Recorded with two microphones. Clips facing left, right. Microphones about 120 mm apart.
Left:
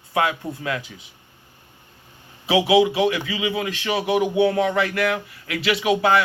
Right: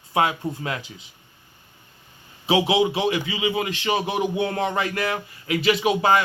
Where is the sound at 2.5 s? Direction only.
25° right (ahead or behind).